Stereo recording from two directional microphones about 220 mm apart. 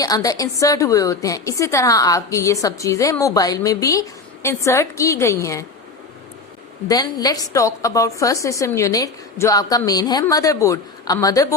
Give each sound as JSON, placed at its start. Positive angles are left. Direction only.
{"t": 0.0, "sound": "a woman's voice", "side_deg": 15}
{"t": 6.8, "sound": "a woman's voice", "side_deg": 15}